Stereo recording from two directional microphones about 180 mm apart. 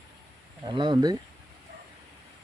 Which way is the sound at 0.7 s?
25° right (ahead or behind).